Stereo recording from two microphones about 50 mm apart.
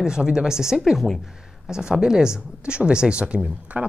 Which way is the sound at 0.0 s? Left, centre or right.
Centre.